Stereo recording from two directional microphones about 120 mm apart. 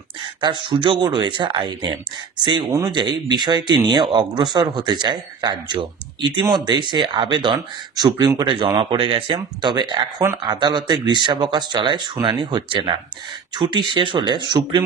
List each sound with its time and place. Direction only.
0.4 s speech: 40° right (ahead or behind)
8.7 s speech: 45° right (ahead or behind)